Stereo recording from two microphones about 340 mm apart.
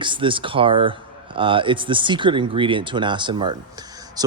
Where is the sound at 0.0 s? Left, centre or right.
Centre.